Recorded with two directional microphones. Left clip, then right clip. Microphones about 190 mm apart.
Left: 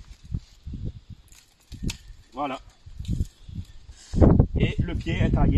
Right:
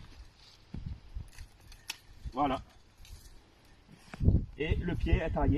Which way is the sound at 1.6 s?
Centre (ahead or behind).